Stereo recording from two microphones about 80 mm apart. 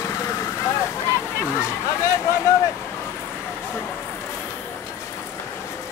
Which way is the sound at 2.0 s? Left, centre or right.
Left.